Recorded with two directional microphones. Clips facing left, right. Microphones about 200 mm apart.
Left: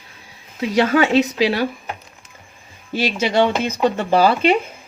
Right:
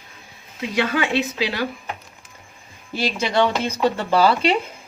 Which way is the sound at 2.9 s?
15° left (ahead or behind).